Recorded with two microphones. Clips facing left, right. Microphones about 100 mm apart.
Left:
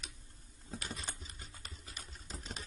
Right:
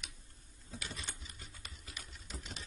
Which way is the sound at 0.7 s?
40° left (ahead or behind).